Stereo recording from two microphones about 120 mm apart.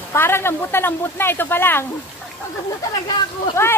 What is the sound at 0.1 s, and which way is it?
Speech, 20° left (ahead or behind).